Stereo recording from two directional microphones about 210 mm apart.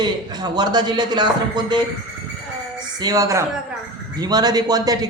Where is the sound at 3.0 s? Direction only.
15° right (ahead or behind).